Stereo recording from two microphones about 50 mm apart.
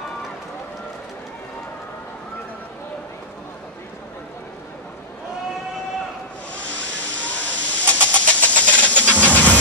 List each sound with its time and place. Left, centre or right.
6.5 s steam: left